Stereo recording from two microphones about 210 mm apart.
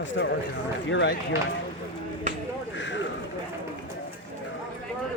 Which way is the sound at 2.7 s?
60° left (ahead or behind).